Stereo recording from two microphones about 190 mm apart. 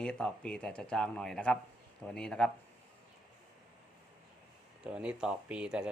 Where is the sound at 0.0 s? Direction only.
5° left (ahead or behind).